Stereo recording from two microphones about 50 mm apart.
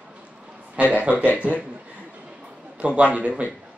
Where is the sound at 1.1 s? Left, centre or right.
Left.